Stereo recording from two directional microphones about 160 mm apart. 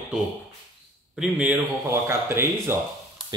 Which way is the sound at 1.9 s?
15° right (ahead or behind).